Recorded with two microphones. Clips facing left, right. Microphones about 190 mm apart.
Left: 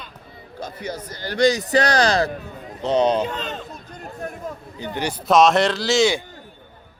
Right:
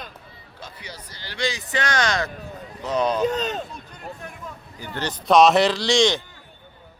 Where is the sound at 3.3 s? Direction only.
40° right (ahead or behind).